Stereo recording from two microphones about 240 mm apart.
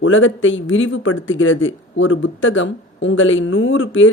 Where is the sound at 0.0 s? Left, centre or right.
Left.